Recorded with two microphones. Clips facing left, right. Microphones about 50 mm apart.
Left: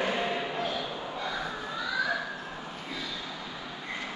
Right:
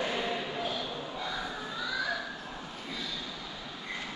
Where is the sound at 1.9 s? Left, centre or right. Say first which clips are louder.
Left 4 dB; centre.